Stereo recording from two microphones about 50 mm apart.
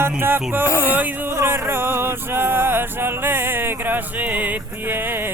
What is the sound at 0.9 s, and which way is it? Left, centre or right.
Speech, right.